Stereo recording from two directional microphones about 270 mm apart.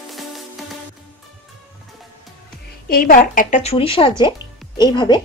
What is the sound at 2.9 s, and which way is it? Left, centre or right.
Speech, left.